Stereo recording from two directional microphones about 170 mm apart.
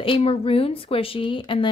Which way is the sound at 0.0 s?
35° left (ahead or behind).